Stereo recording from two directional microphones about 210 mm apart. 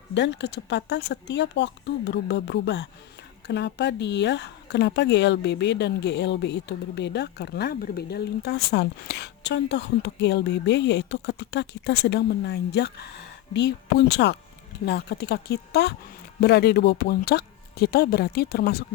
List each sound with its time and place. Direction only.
0.1 s speech: 55° left (ahead or behind)